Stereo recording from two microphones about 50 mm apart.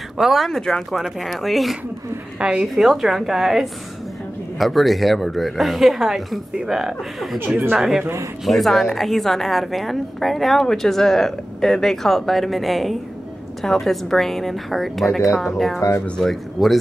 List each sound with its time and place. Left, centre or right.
0.2 s a woman's voice: centre
2.4 s speech: centre
2.7 s a woman's voice: centre
8.5 s a woman's voice: centre